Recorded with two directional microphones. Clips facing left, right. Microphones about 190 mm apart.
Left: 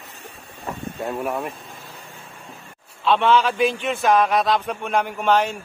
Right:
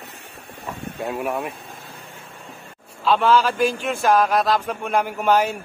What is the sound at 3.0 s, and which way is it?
A man's voice, centre (ahead or behind).